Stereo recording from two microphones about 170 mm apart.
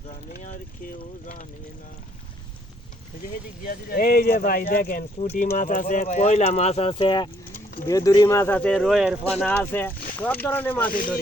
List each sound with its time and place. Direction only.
0.4 s speech: 50° left (ahead or behind)
3.6 s speech: 60° left (ahead or behind); by 7.3 s 30° left (ahead or behind)
7.5 s speech: 15° left (ahead or behind); by 9.5 s 5° right (ahead or behind)
9.5 s speech: 10° left (ahead or behind)